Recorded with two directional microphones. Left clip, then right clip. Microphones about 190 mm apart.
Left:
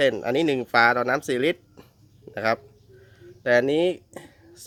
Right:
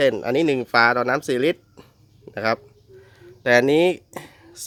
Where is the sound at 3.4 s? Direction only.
25° right (ahead or behind).